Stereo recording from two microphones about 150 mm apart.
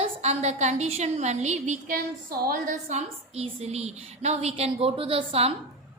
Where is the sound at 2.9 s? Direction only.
45° right (ahead or behind).